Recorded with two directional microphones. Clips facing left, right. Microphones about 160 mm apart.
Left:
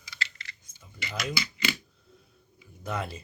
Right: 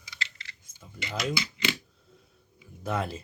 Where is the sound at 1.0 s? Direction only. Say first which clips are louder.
Right 3 dB; 25° right (ahead or behind).